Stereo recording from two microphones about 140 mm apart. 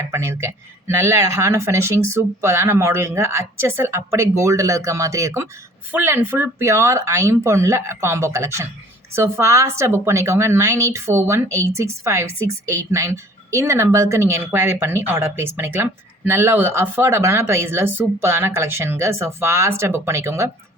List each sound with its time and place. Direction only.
0.1 s a woman's voice: 15° right (ahead or behind)